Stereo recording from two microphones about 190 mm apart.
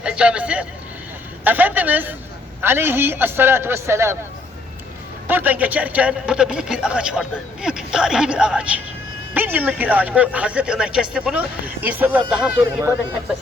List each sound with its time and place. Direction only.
0.0 s a man's voice: 5° right (ahead or behind)
5.3 s a man's voice: 10° right (ahead or behind)